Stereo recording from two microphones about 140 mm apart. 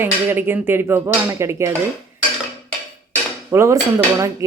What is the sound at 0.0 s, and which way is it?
Speech, 15° right (ahead or behind).